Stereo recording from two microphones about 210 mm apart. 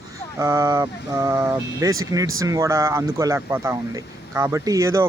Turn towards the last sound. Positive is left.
turn(degrees=-15)  # may be behind; listen again after turning